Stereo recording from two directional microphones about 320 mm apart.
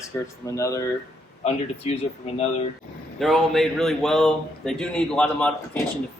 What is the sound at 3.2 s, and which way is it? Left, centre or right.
A man's voice, centre.